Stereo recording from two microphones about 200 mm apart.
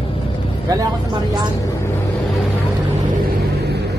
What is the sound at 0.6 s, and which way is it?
Speech, 20° right (ahead or behind).